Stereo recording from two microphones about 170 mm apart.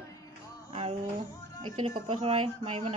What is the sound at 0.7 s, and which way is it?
Music, 35° right (ahead or behind).